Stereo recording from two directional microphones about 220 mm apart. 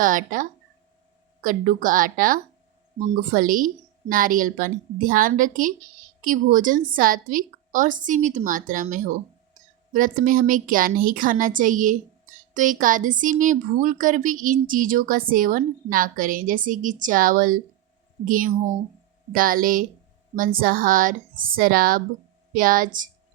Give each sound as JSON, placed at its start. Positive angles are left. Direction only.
{"t": 0.0, "sound": "a woman's voice", "side_deg": -35}
{"t": 9.6, "sound": "a sound", "side_deg": -35}
{"t": 9.9, "sound": "a woman's voice", "side_deg": -35}